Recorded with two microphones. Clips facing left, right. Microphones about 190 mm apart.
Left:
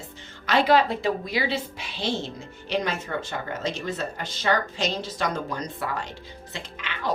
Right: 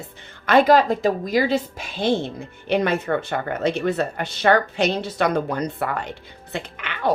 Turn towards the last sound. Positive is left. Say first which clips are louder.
# right 6 dB
turn(degrees=-60)  # may be behind; listen again after turning